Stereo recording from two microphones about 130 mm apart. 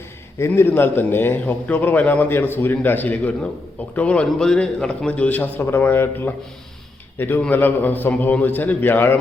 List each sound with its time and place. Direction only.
0.3 s a man's voice: 20° left (ahead or behind)